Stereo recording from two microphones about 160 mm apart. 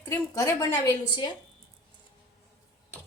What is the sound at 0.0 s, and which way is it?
A woman's voice, 15° left (ahead or behind).